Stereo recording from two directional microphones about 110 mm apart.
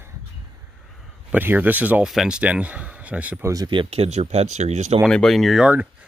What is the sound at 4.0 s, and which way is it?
Speech, 80° right.